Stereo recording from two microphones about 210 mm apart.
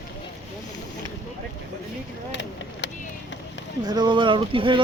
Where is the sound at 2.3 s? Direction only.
60° left (ahead or behind).